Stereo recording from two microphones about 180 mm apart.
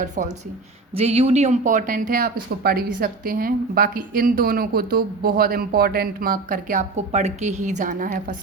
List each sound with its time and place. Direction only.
0.2 s speech: 50° right (ahead or behind)
0.9 s speech: 35° right (ahead or behind); by 8.4 s 50° right (ahead or behind)